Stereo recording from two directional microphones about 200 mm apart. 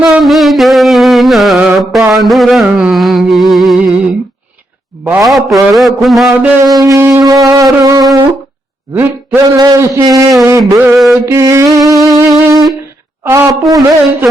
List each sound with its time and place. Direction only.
0.0 s music: centre (ahead or behind)
5.0 s a man's voice: 5° right (ahead or behind)
12.0 s music: 15° right (ahead or behind)
13.2 s a man's voice: 10° right (ahead or behind)